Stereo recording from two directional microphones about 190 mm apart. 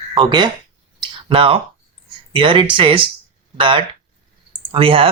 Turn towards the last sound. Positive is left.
turn(degrees=-30)  # may be behind; listen again after turning